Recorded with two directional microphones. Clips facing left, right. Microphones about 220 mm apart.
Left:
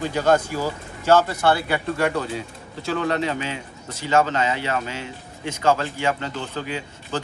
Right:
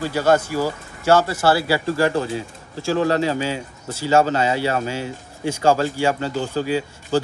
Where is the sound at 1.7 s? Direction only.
30° right (ahead or behind).